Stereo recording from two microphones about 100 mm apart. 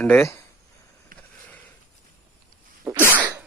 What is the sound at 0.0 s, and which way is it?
Speech, 20° left (ahead or behind).